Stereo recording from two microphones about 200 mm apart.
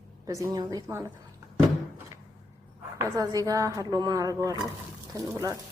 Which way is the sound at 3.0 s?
15° right (ahead or behind).